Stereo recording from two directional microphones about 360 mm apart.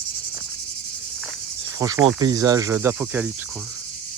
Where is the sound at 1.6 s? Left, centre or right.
Centre.